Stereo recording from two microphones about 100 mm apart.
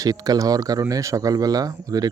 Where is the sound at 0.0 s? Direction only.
40° right (ahead or behind).